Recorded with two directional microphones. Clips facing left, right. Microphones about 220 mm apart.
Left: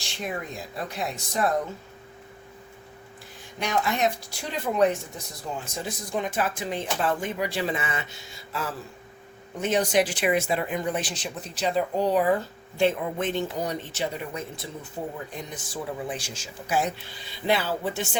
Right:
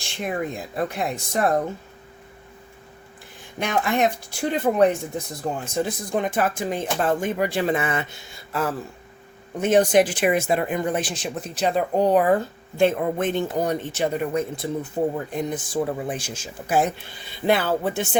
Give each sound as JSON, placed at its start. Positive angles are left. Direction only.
{"t": 0.9, "sound": "speech", "side_deg": -55}
{"t": 3.6, "sound": "speech", "side_deg": -55}